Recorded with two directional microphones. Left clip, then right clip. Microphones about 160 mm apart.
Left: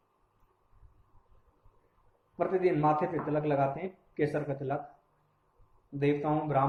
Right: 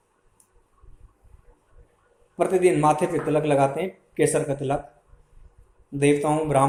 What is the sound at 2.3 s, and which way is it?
A man's voice, 45° right (ahead or behind).